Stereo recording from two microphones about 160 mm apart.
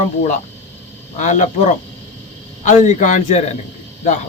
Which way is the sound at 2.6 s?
45° left (ahead or behind).